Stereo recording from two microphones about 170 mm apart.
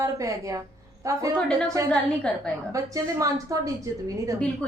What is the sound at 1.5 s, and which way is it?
A woman's voice, 5° left (ahead or behind).